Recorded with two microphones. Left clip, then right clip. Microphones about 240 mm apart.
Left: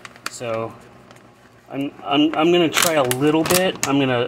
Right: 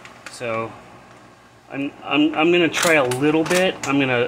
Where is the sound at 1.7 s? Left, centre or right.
Left.